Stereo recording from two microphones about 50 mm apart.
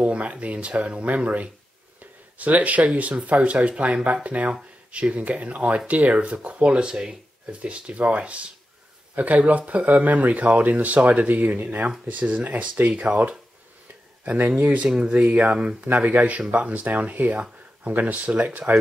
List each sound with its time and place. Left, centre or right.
0.0 s speech: right
12.9 s speech: right
14.2 s speech: right
15.9 s speech: right